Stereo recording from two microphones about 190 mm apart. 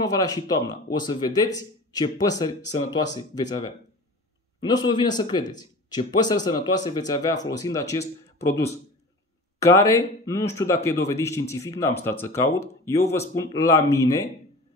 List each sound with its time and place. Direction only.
0.0 s speech: 20° left (ahead or behind)